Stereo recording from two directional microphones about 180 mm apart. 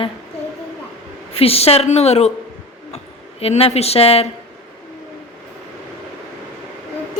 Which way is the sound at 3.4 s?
35° left (ahead or behind).